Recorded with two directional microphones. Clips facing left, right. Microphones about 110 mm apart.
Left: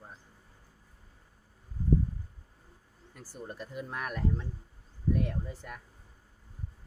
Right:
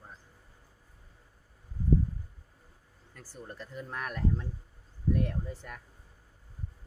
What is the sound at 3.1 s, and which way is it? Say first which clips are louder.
Speech: left 2 dB; 10° left (ahead or behind).